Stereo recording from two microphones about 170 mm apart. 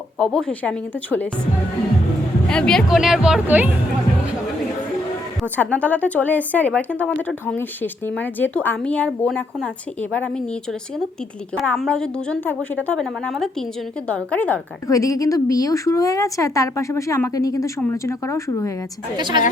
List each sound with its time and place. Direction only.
0.2 s a woman's voice: 5° left (ahead or behind)
2.5 s a woman's voice: 5° left (ahead or behind)
5.4 s a woman's voice: 10° left (ahead or behind)
14.8 s a woman's voice: 20° left (ahead or behind)
19.1 s a woman's voice: 25° right (ahead or behind)